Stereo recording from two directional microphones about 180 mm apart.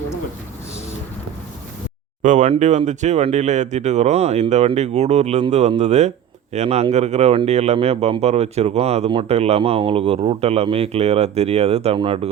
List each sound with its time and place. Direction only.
2.2 s speech: 40° right (ahead or behind)